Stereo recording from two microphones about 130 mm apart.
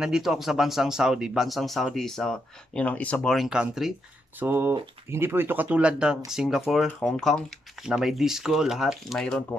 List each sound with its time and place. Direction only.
0.0 s speech: 5° right (ahead or behind)
4.4 s speech: 15° right (ahead or behind); by 9.4 s centre (ahead or behind)